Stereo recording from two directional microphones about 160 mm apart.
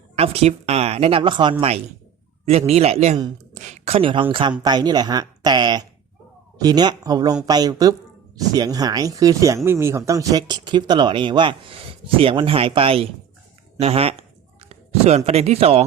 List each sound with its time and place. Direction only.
0.2 s speech: 40° right (ahead or behind)
2.5 s speech: 40° right (ahead or behind)